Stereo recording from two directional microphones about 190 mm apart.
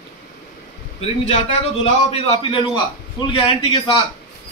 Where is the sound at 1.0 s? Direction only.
35° left (ahead or behind).